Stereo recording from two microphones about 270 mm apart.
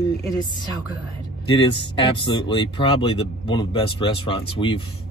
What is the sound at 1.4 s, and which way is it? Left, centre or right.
Speech, centre.